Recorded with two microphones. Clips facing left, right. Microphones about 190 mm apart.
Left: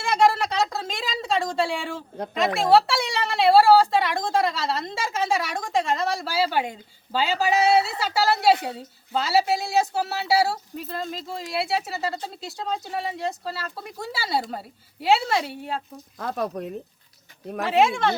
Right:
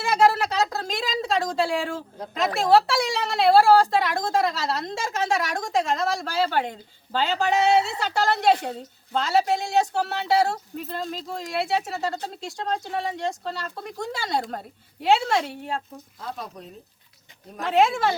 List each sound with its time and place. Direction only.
0.0 s a woman's voice: centre (ahead or behind)
16.2 s speech: 60° left (ahead or behind)
17.7 s a woman's voice: centre (ahead or behind)